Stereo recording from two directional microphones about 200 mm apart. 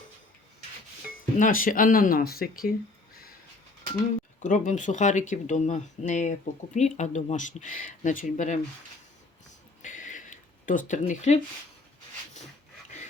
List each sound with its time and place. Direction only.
1.1 s speech: 45° left (ahead or behind)
4.4 s speech: 40° left (ahead or behind)
9.8 s a sound: 40° left (ahead or behind)